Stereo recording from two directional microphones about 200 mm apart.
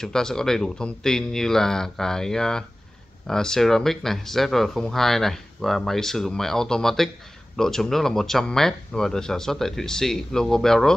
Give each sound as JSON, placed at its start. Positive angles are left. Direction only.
{"t": 0.0, "sound": "speech", "side_deg": 5}